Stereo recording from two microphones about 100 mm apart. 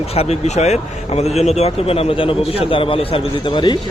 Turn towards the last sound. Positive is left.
turn(degrees=50)  # may be behind; listen again after turning